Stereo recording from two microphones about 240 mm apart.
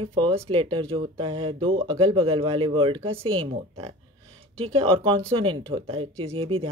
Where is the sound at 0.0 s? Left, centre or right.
Right.